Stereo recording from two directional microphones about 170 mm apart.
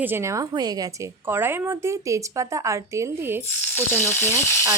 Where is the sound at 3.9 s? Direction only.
15° left (ahead or behind).